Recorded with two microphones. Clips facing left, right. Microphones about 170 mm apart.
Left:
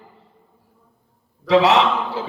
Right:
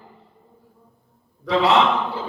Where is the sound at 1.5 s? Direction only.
75° left (ahead or behind).